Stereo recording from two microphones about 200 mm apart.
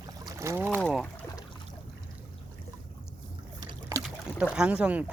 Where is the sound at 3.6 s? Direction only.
20° right (ahead or behind).